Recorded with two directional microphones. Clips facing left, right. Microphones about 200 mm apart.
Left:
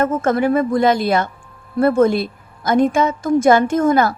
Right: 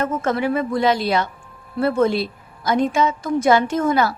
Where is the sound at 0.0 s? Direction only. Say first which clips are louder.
Left 4 dB; 50° left (ahead or behind).